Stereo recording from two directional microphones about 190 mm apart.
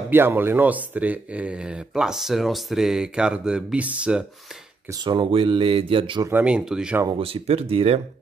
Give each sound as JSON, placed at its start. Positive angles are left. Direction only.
{"t": 0.1, "sound": "speech", "side_deg": -10}
{"t": 4.8, "sound": "speech", "side_deg": -25}
{"t": 6.3, "sound": "speech", "side_deg": -5}
{"t": 7.1, "sound": "speech", "side_deg": -30}